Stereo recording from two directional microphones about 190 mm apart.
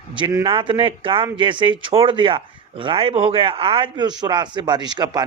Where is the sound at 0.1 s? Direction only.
25° right (ahead or behind).